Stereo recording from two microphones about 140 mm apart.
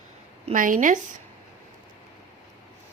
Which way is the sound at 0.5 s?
75° right (ahead or behind).